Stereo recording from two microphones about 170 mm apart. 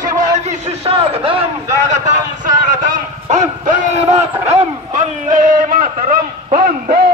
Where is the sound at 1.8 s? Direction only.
45° right (ahead or behind).